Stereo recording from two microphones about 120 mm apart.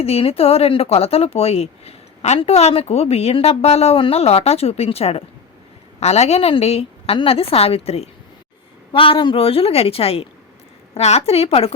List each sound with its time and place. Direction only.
0.0 s a woman's voice: 55° left (ahead or behind)